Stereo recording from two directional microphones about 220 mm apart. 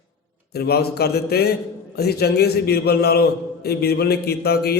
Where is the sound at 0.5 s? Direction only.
45° left (ahead or behind).